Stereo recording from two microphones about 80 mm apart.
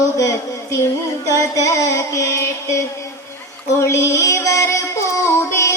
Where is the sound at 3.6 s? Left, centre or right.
Left.